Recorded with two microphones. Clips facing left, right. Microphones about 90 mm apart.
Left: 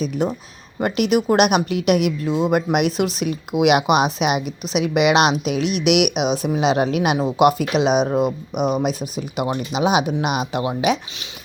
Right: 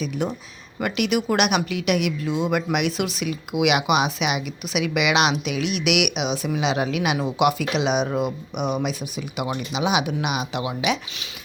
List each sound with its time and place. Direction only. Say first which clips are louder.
0.0 s speech: left 4 dB; 40° left (ahead or behind)